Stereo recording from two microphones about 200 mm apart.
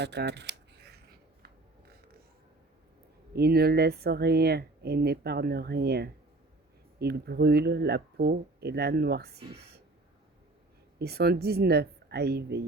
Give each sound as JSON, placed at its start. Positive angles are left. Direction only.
{"t": 0.0, "sound": "camera", "side_deg": -60}
{"t": 3.3, "sound": "speech", "side_deg": -50}
{"t": 11.0, "sound": "speech", "side_deg": -50}